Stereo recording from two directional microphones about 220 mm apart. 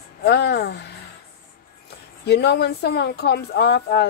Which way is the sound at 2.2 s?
50° left (ahead or behind).